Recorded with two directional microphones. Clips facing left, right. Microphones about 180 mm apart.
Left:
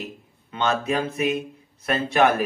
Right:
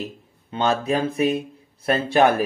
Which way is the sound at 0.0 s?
35° right (ahead or behind).